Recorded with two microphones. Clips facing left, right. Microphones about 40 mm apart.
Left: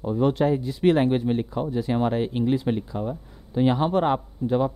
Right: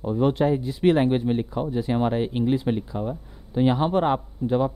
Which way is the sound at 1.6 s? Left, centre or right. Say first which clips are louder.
Even; centre.